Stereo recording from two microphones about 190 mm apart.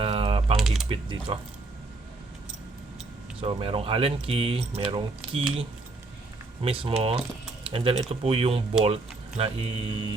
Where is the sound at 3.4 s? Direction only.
30° right (ahead or behind).